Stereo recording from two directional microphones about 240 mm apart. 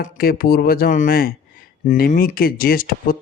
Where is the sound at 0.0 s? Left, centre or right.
Left.